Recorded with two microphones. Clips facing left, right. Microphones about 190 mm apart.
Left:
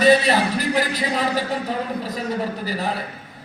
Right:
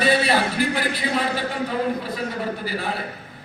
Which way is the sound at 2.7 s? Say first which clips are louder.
Left 2 dB; 40° left (ahead or behind).